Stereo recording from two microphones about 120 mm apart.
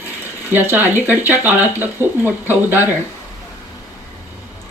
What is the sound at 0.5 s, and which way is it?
Speech, 15° right (ahead or behind).